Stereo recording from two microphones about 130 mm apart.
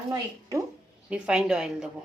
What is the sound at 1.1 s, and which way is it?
Speech, 5° right (ahead or behind).